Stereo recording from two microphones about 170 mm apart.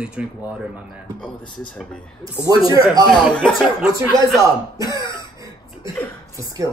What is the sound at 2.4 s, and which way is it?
Speech, 20° right (ahead or behind).